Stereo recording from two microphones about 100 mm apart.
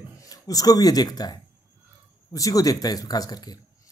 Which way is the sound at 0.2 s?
35° left (ahead or behind).